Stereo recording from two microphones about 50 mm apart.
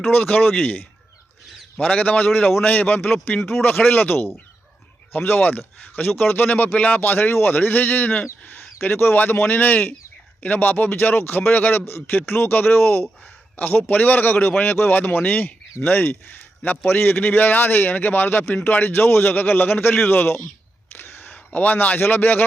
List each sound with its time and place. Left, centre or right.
0.1 s speech: left
2.0 s speech: left
21.2 s a man's voice: left